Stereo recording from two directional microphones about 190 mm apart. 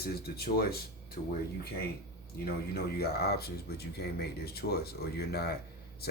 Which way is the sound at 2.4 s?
55° left (ahead or behind).